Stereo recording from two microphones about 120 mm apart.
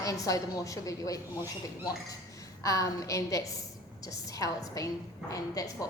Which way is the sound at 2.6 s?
25° left (ahead or behind).